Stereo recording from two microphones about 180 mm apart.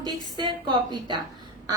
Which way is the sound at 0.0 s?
25° right (ahead or behind).